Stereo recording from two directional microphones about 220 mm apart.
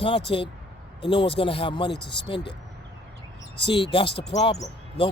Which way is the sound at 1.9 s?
50° left (ahead or behind).